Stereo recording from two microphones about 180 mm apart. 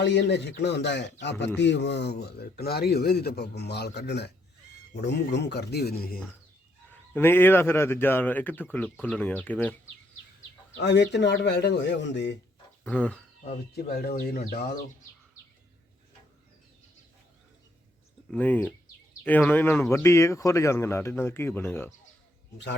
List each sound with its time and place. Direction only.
0.0 s speech: 75° left (ahead or behind); by 6.1 s 60° left (ahead or behind)
7.1 s speech: 10° left (ahead or behind)
10.8 s speech: 70° left (ahead or behind)
12.8 s speech: 5° left (ahead or behind)
13.7 s speech: 60° left (ahead or behind)
18.3 s speech: 10° left (ahead or behind)